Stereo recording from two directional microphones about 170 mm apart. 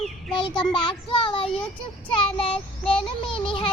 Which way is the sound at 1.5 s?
5° left (ahead or behind).